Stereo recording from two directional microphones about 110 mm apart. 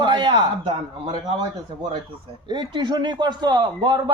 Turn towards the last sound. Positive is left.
turn(degrees=-45)  # may be behind; listen again after turning